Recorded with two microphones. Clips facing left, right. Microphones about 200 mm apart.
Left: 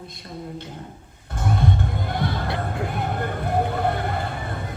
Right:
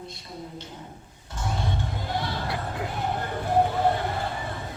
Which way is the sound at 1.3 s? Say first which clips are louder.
Left 7 dB; 55° left (ahead or behind).